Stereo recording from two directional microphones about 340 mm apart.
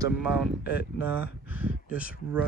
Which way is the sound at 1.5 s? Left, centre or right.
Centre.